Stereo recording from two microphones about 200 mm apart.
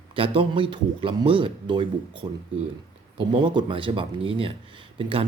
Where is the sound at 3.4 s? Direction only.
25° right (ahead or behind).